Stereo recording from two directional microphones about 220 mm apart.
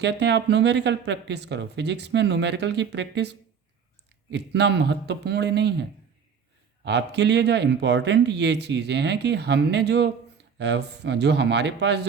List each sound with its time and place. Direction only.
0.0 s speech: 50° right (ahead or behind)
6.8 s speech: 50° right (ahead or behind)